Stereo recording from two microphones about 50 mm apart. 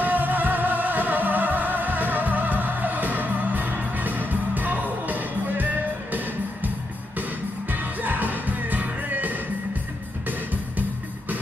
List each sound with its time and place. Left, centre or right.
0.0 s music: right
7.7 s music: right